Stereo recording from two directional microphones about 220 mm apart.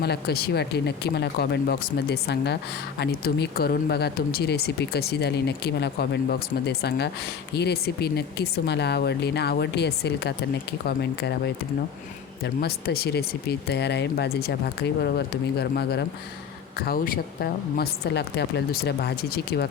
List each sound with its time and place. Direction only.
0.0 s speech: 45° left (ahead or behind)